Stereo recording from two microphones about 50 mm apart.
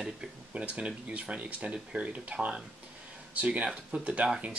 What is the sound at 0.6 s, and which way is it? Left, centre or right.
Speech, right.